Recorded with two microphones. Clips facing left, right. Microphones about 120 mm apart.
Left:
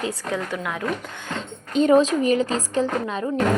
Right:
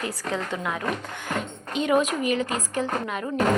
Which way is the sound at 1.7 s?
35° left (ahead or behind).